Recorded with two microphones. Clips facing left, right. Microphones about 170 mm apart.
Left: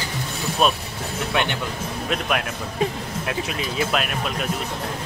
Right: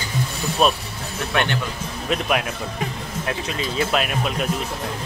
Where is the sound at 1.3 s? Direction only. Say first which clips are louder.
Right 2 dB; 15° left (ahead or behind).